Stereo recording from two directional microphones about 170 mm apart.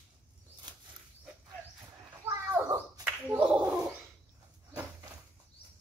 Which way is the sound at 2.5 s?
10° right (ahead or behind).